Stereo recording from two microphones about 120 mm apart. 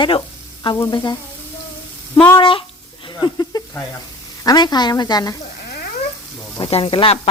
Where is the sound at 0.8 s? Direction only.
35° left (ahead or behind).